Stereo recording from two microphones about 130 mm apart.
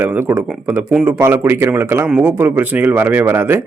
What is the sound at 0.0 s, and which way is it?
Speech, 15° right (ahead or behind).